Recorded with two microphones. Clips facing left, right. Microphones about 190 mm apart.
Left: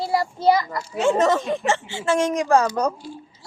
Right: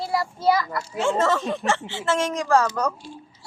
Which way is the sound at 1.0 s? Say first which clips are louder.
Left 3 dB; 15° left (ahead or behind).